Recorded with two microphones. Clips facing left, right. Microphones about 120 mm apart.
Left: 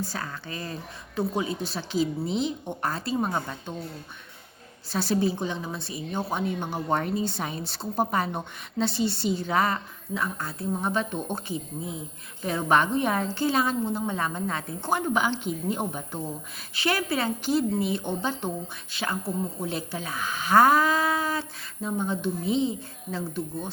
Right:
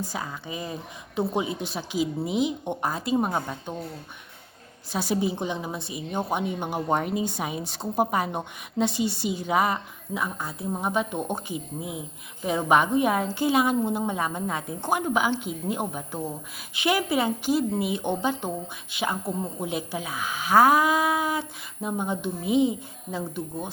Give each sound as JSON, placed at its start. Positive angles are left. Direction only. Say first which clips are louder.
{"t": 0.0, "sound": "a woman's voice", "louder": "right 1 dB", "side_deg": -15}
{"t": 4.9, "sound": "a woman's voice", "louder": "left 1 dB", "side_deg": -15}
{"t": 16.7, "sound": "a woman's voice", "louder": "right 3 dB", "side_deg": -15}